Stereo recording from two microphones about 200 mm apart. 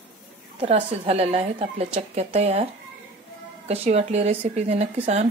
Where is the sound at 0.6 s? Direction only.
30° right (ahead or behind).